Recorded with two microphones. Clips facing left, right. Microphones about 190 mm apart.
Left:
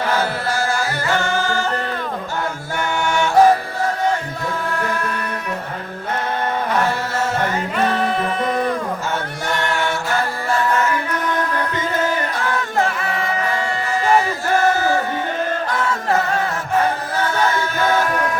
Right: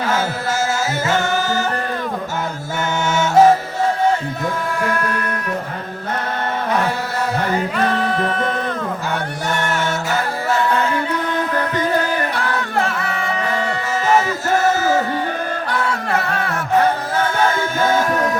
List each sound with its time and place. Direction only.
0.7 s music: 20° right (ahead or behind)
3.1 s music: 20° right (ahead or behind)